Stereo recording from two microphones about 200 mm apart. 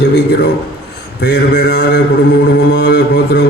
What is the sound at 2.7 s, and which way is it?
Mantra, 55° left (ahead or behind).